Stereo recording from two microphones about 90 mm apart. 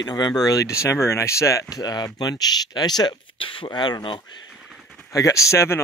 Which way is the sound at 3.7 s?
50° left (ahead or behind).